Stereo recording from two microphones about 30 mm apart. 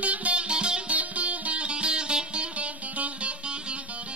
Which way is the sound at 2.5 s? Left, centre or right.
Right.